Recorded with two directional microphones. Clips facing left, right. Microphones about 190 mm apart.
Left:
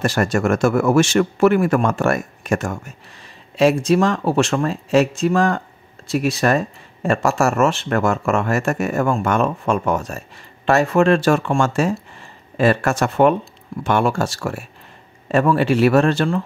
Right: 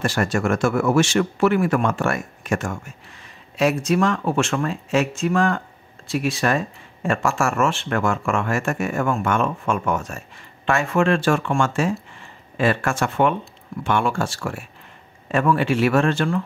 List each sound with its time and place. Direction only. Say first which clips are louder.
0.0 s speech: left 3 dB; 40° left (ahead or behind)